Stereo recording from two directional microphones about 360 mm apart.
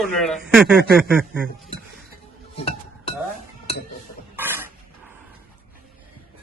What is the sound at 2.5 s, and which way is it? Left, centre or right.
Music, centre.